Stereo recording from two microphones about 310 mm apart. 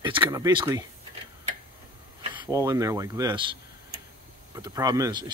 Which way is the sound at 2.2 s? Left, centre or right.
Centre.